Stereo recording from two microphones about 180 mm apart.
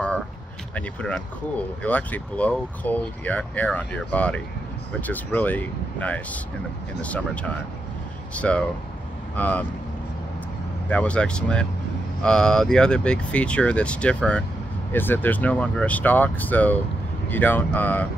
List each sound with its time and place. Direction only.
0.7 s speech: 5° left (ahead or behind)
10.9 s speech: 5° left (ahead or behind)